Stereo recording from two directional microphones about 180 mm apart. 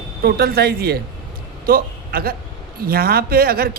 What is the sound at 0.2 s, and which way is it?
A woman's voice, 60° right (ahead or behind).